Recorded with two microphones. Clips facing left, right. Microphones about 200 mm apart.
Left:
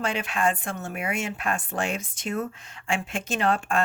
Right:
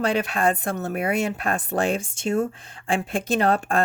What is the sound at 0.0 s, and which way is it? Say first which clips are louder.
Speech: right 4 dB; 35° right (ahead or behind).